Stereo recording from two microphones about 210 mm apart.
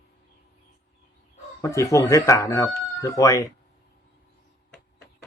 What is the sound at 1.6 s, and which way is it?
Speech, 15° left (ahead or behind).